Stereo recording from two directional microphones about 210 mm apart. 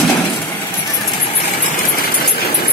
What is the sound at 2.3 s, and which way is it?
Vehicle, 45° left (ahead or behind).